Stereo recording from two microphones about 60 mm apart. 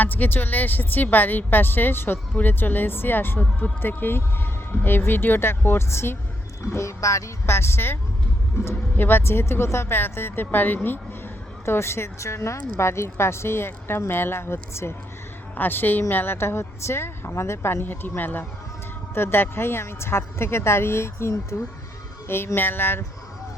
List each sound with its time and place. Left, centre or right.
0.0 s a woman's voice: left
6.6 s speech: left
7.5 s a woman's voice: left
11.6 s a woman's voice: left
15.5 s a woman's voice: left
22.5 s a woman's voice: left